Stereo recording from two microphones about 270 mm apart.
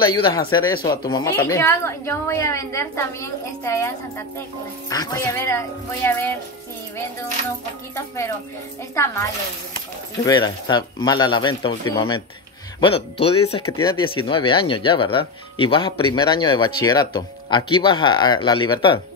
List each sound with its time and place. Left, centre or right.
0.0 s speech: centre
8.9 s speech: centre
13.7 s speech: centre